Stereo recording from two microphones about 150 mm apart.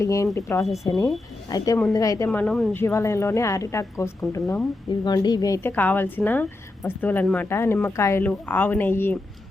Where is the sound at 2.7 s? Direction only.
20° left (ahead or behind).